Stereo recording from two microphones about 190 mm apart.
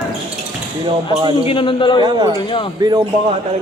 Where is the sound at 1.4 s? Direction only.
25° left (ahead or behind).